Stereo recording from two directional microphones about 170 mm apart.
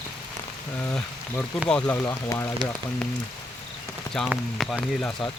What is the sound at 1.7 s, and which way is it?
Speech, 5° left (ahead or behind).